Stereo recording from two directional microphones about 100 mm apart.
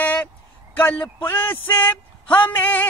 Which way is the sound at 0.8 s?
20° left (ahead or behind).